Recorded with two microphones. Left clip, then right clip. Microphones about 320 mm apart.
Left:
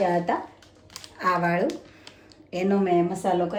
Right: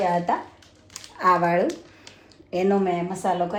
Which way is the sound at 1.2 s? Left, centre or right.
Centre.